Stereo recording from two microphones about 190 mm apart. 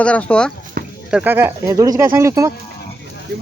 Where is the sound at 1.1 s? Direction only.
5° right (ahead or behind).